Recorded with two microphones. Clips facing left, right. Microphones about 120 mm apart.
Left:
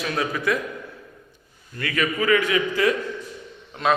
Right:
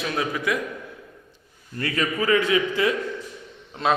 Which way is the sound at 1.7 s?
30° right (ahead or behind).